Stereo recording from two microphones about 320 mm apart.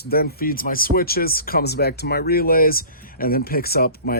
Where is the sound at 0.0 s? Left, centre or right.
Left.